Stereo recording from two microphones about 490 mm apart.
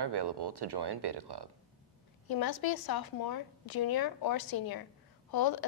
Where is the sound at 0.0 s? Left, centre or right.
Right.